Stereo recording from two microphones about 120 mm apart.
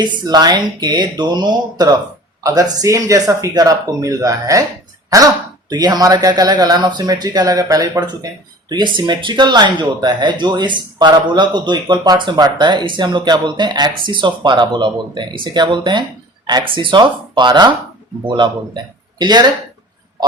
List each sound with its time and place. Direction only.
0.0 s speech: 35° right (ahead or behind)